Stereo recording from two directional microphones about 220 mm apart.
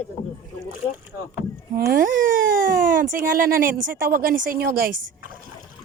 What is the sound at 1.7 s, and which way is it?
Speech, 40° right (ahead or behind).